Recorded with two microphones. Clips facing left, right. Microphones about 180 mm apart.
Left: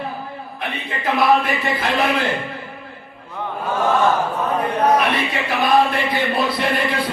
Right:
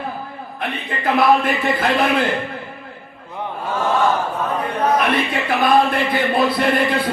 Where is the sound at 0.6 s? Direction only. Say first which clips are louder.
Right 2 dB; 55° right (ahead or behind).